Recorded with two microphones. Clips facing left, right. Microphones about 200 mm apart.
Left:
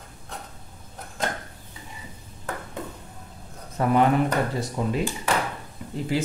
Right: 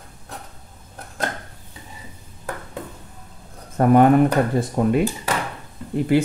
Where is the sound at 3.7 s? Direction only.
50° right (ahead or behind).